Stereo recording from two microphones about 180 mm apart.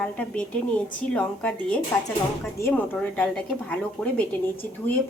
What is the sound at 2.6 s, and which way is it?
A woman's voice, 10° left (ahead or behind).